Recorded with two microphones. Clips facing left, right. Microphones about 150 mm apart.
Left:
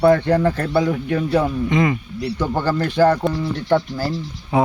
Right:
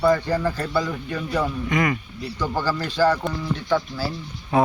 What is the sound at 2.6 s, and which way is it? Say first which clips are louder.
Speech: left 5 dB; 55° left (ahead or behind).